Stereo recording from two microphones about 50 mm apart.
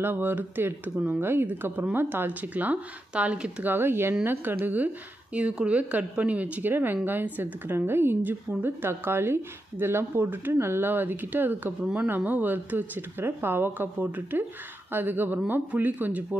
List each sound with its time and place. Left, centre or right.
0.0 s a woman's voice: right
3.6 s a woman's voice: right
6.7 s a woman's voice: right
7.7 s speech: right
8.2 s a woman's voice: right
13.9 s a woman's voice: right